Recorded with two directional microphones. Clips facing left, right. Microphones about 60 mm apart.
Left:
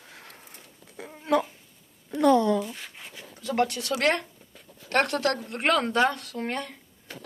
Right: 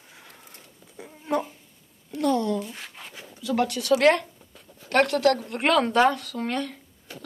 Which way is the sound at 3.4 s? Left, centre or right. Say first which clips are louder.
Right 1 dB; left.